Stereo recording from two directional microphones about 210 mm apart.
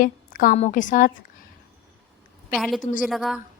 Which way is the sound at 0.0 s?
40° left (ahead or behind).